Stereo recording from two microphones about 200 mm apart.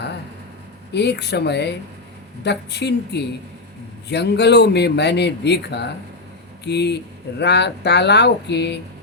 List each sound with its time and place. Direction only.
0.9 s speech: 55° left (ahead or behind)